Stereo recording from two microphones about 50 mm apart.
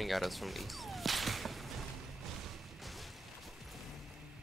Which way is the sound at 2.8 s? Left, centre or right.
Centre.